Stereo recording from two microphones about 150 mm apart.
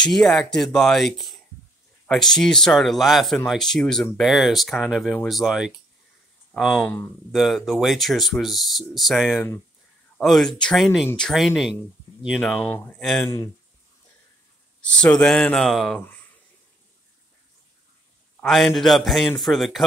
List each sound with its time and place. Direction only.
0.0 s speech: 5° left (ahead or behind)
13.2 s speech: 20° left (ahead or behind)
14.8 s speech: 5° left (ahead or behind)
18.4 s speech: centre (ahead or behind)